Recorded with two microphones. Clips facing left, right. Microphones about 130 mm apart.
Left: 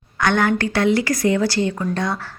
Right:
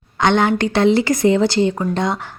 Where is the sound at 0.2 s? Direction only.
20° right (ahead or behind).